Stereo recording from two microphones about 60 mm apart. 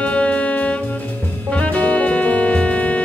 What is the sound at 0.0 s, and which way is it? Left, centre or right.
Music, left.